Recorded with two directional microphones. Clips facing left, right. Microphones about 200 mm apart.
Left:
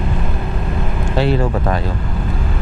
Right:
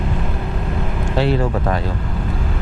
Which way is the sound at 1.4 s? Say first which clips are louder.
Left 1 dB; 20° left (ahead or behind).